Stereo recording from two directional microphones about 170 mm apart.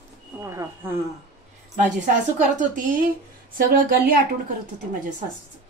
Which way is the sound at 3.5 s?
55° right (ahead or behind).